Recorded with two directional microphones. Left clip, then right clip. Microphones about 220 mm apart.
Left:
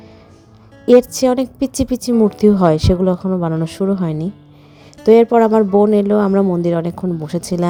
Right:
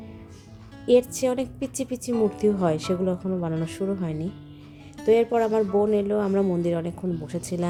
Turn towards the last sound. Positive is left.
turn(degrees=35)  # may be behind; listen again after turning